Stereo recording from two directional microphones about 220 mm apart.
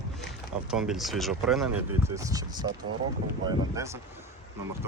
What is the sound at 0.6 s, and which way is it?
Speech, 5° right (ahead or behind).